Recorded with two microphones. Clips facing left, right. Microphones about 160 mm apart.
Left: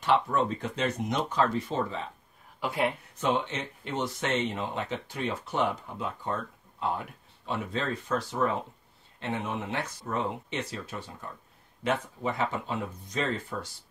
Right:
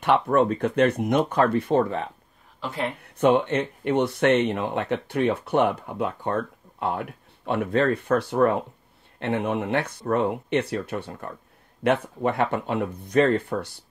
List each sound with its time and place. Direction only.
0.0 s speech: 60° right (ahead or behind)
2.6 s speech: 10° left (ahead or behind)
3.2 s speech: 60° right (ahead or behind)